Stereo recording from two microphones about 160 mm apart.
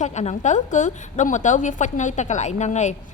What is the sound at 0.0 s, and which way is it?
A woman's voice, 45° left (ahead or behind).